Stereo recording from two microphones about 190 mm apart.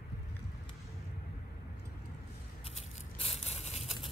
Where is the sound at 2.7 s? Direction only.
35° left (ahead or behind).